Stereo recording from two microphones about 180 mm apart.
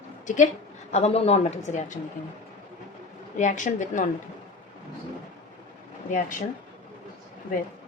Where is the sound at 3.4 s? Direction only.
45° left (ahead or behind).